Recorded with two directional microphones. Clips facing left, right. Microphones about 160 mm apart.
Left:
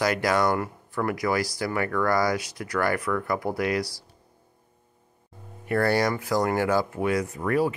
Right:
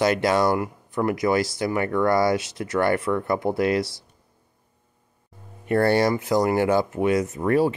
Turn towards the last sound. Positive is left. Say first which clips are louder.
# right 4 dB
turn(degrees=-30)  # may be behind; listen again after turning